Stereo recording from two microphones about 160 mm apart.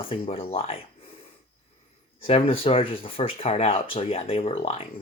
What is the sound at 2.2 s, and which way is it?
Speech, 35° left (ahead or behind).